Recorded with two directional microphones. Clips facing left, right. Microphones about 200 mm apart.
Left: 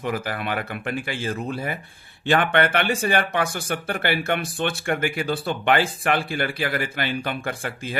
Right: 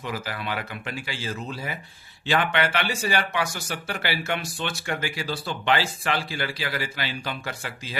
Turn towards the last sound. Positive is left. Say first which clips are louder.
# left 5 dB
turn(degrees=55)  # may be behind; listen again after turning